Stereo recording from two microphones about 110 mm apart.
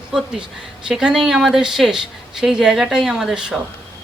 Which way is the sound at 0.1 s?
5° right (ahead or behind).